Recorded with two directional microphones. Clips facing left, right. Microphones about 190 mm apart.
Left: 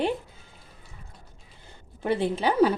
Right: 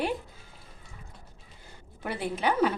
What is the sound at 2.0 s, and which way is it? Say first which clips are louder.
Speech: left 5 dB; 25° left (ahead or behind).